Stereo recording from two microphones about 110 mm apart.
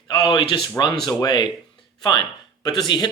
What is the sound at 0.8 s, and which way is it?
Speech, 40° left (ahead or behind).